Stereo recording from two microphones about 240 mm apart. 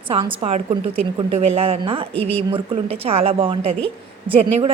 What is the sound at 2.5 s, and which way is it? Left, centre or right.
A woman's voice, right.